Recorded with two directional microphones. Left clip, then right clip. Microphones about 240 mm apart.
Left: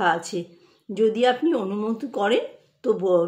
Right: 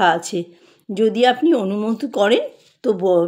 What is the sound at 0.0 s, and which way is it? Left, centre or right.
Speech, right.